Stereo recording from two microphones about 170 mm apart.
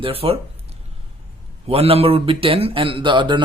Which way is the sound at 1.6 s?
35° right (ahead or behind).